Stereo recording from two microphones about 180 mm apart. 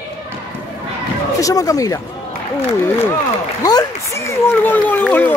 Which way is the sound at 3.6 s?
20° left (ahead or behind).